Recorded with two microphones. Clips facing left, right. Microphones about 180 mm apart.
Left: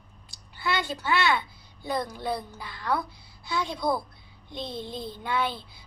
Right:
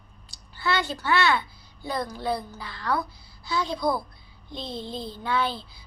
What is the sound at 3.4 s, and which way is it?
Speech, 20° left (ahead or behind).